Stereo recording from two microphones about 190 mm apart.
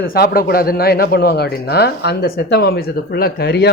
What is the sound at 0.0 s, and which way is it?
A man's voice, 50° left (ahead or behind).